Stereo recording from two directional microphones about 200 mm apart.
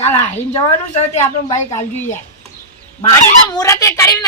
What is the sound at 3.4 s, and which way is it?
Speech, 15° left (ahead or behind).